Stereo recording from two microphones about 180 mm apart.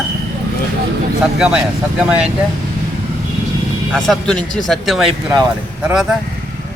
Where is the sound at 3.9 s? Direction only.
Centre (ahead or behind).